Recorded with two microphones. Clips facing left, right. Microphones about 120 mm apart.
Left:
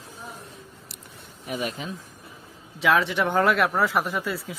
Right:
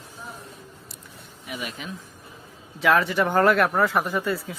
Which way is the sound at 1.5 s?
40° left (ahead or behind).